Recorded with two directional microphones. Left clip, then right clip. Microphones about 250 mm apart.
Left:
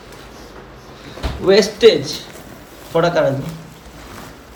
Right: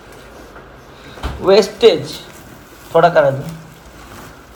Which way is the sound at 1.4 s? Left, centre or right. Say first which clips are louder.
Right 1 dB; centre.